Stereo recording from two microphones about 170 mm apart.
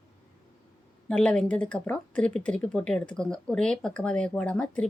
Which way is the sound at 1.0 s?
5° left (ahead or behind).